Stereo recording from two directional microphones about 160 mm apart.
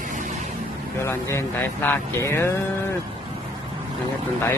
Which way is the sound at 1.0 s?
15° left (ahead or behind).